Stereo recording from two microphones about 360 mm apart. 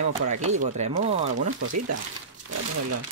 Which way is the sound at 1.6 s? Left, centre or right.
Right.